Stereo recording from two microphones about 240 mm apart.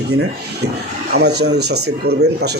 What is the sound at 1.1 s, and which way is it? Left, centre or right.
Speech, right.